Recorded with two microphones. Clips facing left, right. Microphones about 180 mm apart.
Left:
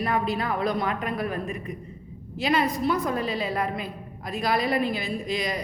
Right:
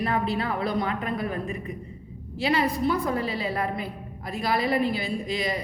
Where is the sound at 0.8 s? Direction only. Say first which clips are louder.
Even; 25° right (ahead or behind).